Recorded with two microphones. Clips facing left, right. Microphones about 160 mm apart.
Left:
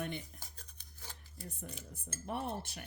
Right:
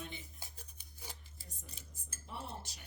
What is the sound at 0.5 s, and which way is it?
Scissors, 10° right (ahead or behind).